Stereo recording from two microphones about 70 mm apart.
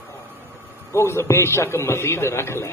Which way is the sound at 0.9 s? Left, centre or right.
Left.